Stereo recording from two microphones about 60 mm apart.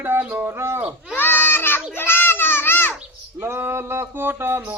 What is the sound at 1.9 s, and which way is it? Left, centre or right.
Children playing, left.